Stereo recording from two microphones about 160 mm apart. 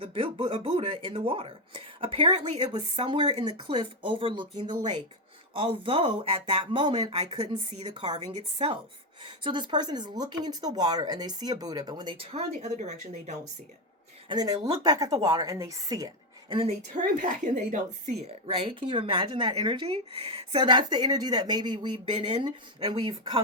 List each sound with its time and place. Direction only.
0.0 s speech: 35° right (ahead or behind)
2.6 s speech: 30° right (ahead or behind)
7.7 s speech: 45° right (ahead or behind)
12.8 s speech: 45° right (ahead or behind)
14.3 s speech: 25° right (ahead or behind)
16.6 s speech: 55° right (ahead or behind); by 23.4 s 30° right (ahead or behind)